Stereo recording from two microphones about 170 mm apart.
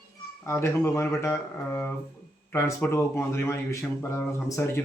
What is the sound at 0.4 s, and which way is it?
Speech, 15° left (ahead or behind).